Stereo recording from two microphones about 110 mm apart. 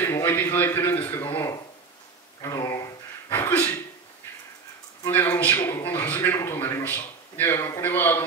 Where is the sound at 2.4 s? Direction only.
30° left (ahead or behind).